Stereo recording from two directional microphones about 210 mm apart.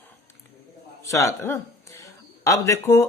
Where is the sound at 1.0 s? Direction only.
15° left (ahead or behind).